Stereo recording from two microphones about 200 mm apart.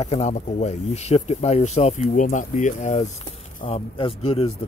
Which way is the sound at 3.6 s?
25° left (ahead or behind).